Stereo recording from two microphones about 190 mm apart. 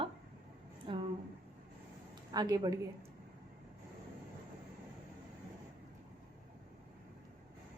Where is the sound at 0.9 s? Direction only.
25° right (ahead or behind).